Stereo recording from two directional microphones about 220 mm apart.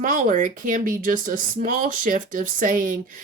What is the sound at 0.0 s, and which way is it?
Speech, 35° right (ahead or behind).